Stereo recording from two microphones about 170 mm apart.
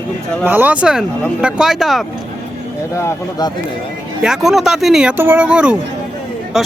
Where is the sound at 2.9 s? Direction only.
20° left (ahead or behind).